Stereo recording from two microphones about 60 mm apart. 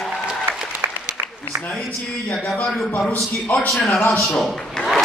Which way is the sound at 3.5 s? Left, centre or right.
Left.